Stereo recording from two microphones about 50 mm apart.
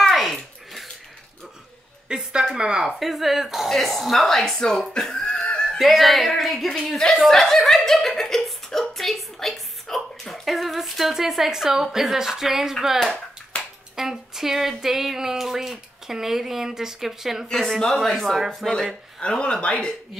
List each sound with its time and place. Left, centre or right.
0.0 s a sound: centre
2.0 s a sound: centre
2.5 s a woman's voice: centre
2.9 s a woman's voice: centre
5.5 s a sound: centre
5.8 s a woman's voice: centre
7.2 s chuckle: centre
13.6 s finger snapping: centre
14.3 s speech: centre
17.5 s a woman's voice: centre
19.1 s speech: left